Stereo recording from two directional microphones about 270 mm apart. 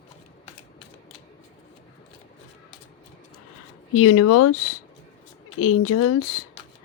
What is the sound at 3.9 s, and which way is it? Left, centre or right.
Speech, left.